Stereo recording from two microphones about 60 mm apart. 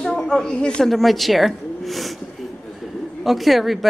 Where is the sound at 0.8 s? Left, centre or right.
Centre.